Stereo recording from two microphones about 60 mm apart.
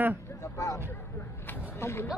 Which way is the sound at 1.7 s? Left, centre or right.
Left.